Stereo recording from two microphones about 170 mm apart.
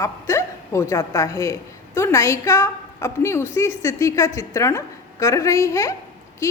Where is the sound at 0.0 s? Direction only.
15° left (ahead or behind).